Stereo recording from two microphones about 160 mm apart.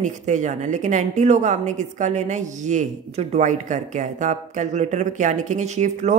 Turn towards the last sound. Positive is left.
turn(degrees=-45)  # may be behind; listen again after turning